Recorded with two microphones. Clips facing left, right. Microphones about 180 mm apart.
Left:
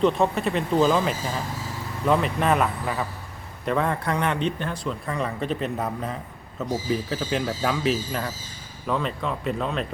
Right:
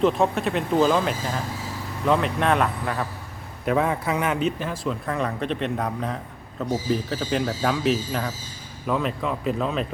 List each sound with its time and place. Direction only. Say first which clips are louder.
0.0 s speech: even; centre (ahead or behind)